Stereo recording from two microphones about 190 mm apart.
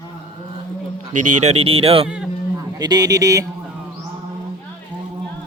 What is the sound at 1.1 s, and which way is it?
Speech, 35° right (ahead or behind).